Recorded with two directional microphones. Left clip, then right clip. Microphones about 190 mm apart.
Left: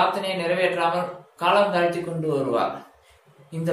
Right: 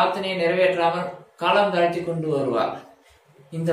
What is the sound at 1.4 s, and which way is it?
A man's voice, 15° left (ahead or behind).